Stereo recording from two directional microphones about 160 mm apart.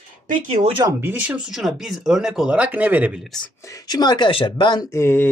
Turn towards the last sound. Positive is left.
turn(degrees=15)  # may be behind; listen again after turning